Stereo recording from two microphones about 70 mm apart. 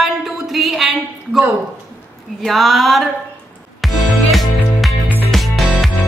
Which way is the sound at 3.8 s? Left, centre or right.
Centre.